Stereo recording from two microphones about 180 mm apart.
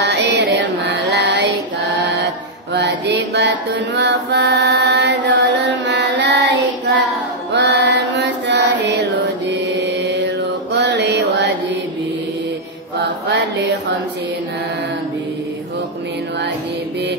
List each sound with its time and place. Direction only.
0.0 s music: 75° right (ahead or behind)
2.0 s mantra: 75° right (ahead or behind)
7.5 s carnatic music: 75° right (ahead or behind)
9.8 s mantra: 75° right (ahead or behind)
13.0 s chant: 75° right (ahead or behind)